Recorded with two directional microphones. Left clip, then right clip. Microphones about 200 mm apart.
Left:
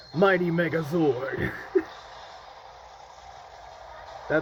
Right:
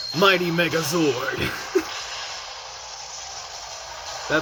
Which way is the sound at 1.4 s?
15° right (ahead or behind).